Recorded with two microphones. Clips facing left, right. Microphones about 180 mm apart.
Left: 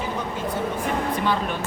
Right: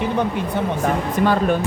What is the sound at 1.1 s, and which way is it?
Speech, 45° right (ahead or behind).